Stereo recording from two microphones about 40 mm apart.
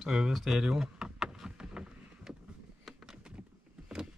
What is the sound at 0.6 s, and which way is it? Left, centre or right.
Power windows, centre.